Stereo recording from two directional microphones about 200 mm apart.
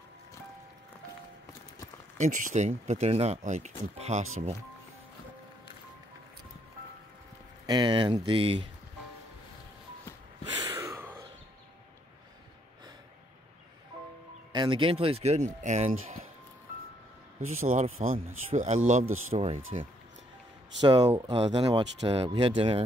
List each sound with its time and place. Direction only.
2.1 s speech: 40° right (ahead or behind)
7.6 s speech: 20° right (ahead or behind)
10.6 s a sound: 15° right (ahead or behind)
14.5 s speech: 25° right (ahead or behind)
17.6 s speech: 35° right (ahead or behind)
19.0 s speech: 90° right
19.3 s speech: 30° right (ahead or behind)
20.8 s speech: 20° right (ahead or behind)